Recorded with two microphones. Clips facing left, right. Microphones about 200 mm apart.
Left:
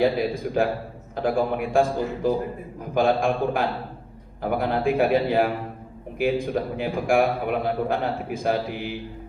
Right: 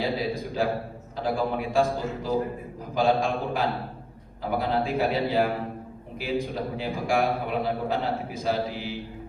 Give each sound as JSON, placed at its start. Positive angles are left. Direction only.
{"t": 0.0, "sound": "a man's voice", "side_deg": 55}